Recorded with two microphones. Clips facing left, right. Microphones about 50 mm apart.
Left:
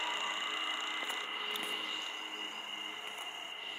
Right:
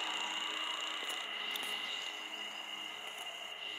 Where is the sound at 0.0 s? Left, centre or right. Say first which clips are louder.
Left 2 dB; left.